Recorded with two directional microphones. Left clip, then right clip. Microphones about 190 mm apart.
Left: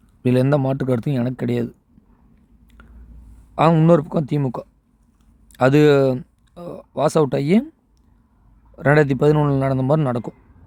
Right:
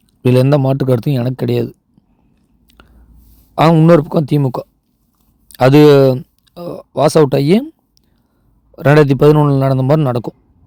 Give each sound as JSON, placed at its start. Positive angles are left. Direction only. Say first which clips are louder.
{"t": 0.2, "sound": "speech", "louder": "right 6 dB", "side_deg": -25}
{"t": 2.7, "sound": "a sound", "louder": "right 5 dB", "side_deg": -20}
{"t": 3.5, "sound": "a man's voice", "louder": "right 6 dB", "side_deg": -25}
{"t": 8.7, "sound": "speech", "louder": "right 6 dB", "side_deg": -25}